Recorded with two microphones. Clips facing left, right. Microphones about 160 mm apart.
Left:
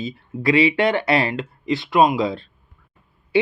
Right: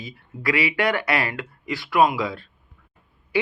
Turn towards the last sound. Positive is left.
turn(degrees=25)  # may be behind; listen again after turning